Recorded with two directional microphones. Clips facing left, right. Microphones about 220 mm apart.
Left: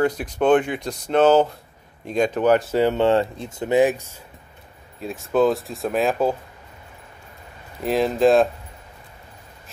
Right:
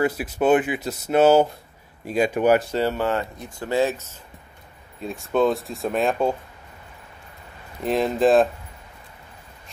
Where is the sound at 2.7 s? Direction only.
20° left (ahead or behind).